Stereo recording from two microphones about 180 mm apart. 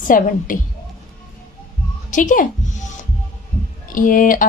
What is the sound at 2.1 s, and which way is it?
Speech, 45° left (ahead or behind).